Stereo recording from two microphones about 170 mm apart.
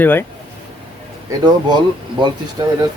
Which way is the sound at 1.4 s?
25° right (ahead or behind).